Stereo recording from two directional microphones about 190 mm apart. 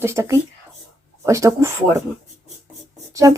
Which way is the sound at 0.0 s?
15° right (ahead or behind).